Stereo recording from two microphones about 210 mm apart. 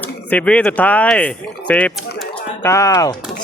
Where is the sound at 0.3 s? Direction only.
5° left (ahead or behind).